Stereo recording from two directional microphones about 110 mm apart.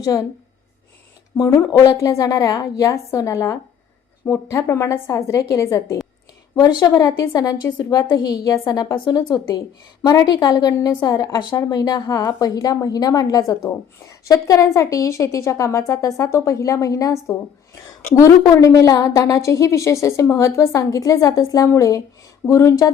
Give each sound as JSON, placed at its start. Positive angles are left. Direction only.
{"t": 0.0, "sound": "a woman's voice", "side_deg": 30}
{"t": 1.4, "sound": "a woman's voice", "side_deg": 30}
{"t": 6.6, "sound": "a woman's voice", "side_deg": 40}